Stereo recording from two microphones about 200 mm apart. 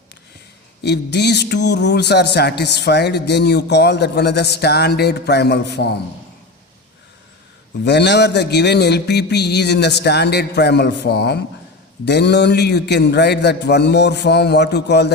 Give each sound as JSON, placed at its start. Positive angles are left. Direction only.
{"t": 0.8, "sound": "speech", "side_deg": 55}
{"t": 7.9, "sound": "speech", "side_deg": 55}